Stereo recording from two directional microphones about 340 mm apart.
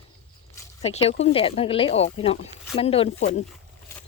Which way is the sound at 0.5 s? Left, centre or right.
Centre.